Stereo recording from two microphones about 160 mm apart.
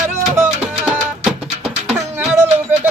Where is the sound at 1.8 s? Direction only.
5° right (ahead or behind).